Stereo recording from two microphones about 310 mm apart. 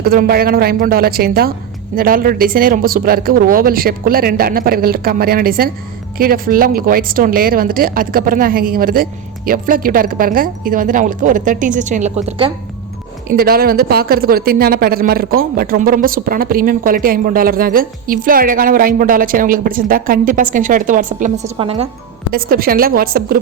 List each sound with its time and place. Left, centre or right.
0.0 s a woman's voice: right
22.3 s a woman's voice: right